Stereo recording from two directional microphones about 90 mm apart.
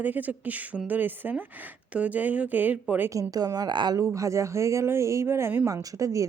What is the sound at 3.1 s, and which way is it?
Speech, 40° right (ahead or behind).